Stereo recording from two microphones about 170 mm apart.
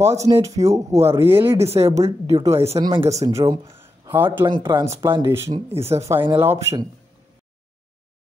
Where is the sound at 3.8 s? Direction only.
10° right (ahead or behind).